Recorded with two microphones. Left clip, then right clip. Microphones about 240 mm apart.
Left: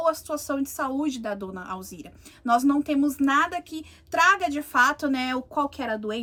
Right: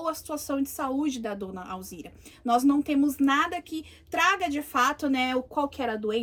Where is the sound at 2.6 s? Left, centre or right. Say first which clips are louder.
Left 1 dB; left.